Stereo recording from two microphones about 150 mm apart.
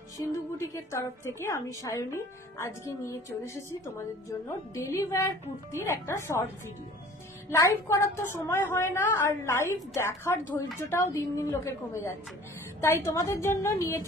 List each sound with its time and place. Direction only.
1.4 s a woman's voice: 20° left (ahead or behind)
7.4 s a woman's voice: 20° left (ahead or behind)